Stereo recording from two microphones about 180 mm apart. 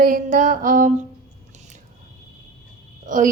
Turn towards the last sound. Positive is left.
turn(degrees=-45)  # may be behind; listen again after turning